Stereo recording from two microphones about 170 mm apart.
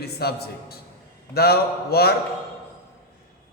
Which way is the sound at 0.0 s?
70° left (ahead or behind).